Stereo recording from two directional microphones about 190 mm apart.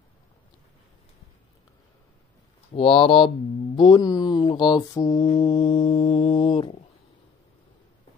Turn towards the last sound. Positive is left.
turn(degrees=25)  # may be behind; listen again after turning